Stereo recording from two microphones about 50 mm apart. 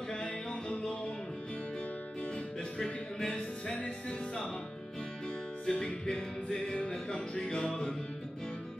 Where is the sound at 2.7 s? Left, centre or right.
Centre.